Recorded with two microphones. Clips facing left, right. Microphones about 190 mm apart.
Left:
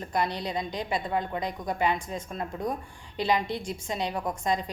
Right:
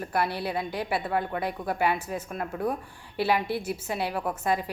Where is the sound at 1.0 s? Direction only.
20° left (ahead or behind).